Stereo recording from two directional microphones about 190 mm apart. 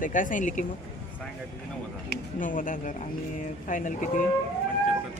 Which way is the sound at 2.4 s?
45° left (ahead or behind).